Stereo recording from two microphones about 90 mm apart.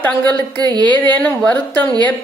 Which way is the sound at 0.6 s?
55° right (ahead or behind).